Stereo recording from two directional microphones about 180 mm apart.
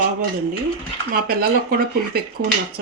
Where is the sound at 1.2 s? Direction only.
55° right (ahead or behind).